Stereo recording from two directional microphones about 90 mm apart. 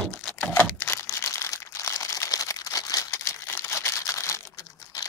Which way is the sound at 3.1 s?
25° left (ahead or behind).